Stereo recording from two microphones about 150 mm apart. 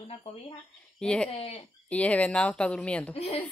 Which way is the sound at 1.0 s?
5° left (ahead or behind).